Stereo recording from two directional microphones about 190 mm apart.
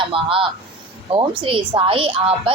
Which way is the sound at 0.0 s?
30° right (ahead or behind).